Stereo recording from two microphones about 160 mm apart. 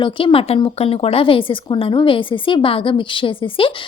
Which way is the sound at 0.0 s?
30° left (ahead or behind).